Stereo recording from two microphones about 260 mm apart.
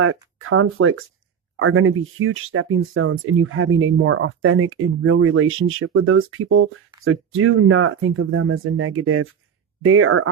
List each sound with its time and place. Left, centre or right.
0.0 s speech: right